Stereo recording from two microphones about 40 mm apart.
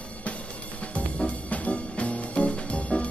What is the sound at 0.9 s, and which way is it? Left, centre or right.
Music, left.